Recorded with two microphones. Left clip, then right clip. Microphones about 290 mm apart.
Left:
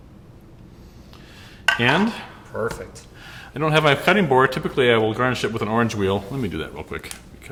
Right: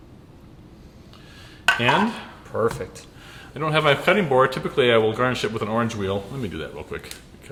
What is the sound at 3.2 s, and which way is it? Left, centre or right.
Speech, left.